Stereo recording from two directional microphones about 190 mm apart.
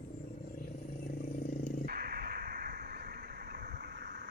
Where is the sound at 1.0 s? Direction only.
50° left (ahead or behind).